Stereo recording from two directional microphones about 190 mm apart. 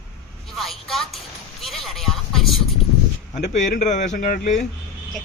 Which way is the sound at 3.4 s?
45° left (ahead or behind).